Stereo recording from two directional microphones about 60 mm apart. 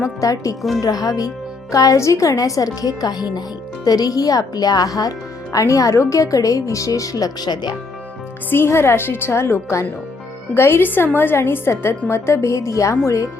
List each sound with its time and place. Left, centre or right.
0.0 s speech: left
0.8 s speech: left
2.0 s a woman's voice: left
2.8 s speech: left
8.4 s a woman's voice: left